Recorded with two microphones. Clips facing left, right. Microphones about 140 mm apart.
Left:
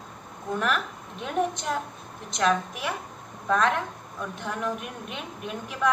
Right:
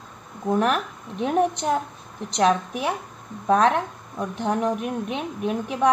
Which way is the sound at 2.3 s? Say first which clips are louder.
Right 4 dB; 35° right (ahead or behind).